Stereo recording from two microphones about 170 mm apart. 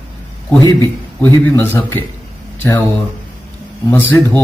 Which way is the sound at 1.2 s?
15° left (ahead or behind).